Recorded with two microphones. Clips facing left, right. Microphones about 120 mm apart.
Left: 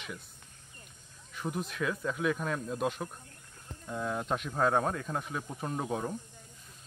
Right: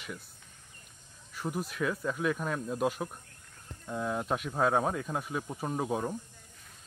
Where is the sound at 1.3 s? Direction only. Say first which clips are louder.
Right 1 dB; 5° right (ahead or behind).